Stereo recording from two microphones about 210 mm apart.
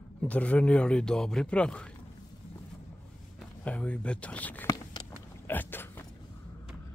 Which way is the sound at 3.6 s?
5° left (ahead or behind).